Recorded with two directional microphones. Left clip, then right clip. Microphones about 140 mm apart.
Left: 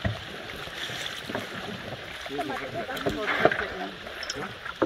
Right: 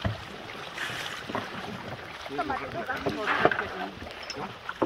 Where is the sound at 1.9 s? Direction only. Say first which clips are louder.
Left 2 dB; 20° left (ahead or behind).